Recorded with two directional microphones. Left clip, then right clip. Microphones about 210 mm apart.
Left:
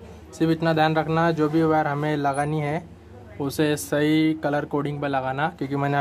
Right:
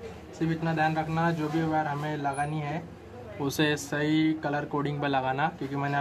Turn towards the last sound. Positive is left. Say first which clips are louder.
# left 4 dB
turn(degrees=30)  # may be behind; listen again after turning